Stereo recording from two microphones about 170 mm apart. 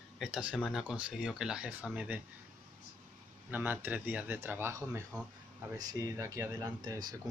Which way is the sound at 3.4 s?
10° right (ahead or behind).